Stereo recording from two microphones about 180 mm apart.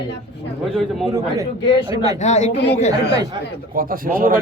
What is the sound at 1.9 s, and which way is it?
Speech, 20° right (ahead or behind).